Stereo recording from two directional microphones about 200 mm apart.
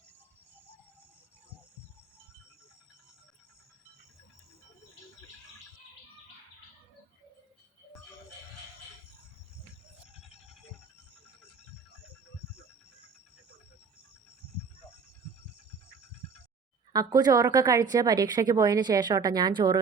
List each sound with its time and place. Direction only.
16.9 s a woman's voice: 20° right (ahead or behind)